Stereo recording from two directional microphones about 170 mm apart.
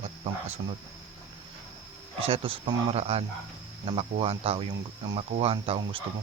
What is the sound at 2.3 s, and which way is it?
Speech, 30° right (ahead or behind).